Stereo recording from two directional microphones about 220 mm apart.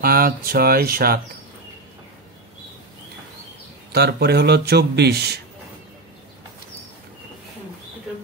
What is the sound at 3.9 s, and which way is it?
A man's voice, 45° right (ahead or behind).